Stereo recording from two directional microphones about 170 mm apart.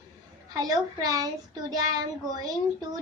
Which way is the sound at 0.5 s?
20° right (ahead or behind).